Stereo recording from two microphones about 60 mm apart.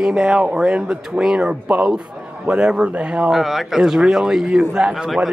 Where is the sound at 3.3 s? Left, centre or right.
Centre.